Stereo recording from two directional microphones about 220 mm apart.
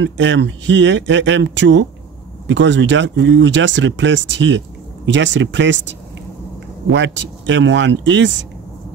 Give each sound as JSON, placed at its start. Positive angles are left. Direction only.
{"t": 0.0, "sound": "speech", "side_deg": -55}